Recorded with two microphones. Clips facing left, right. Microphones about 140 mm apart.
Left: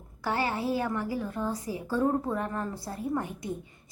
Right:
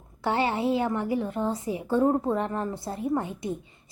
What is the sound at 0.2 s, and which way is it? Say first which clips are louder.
A woman's voice: right 4 dB; 25° right (ahead or behind).